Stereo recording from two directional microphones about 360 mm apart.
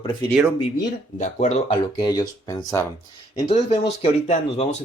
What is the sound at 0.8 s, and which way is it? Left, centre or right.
Speech, centre.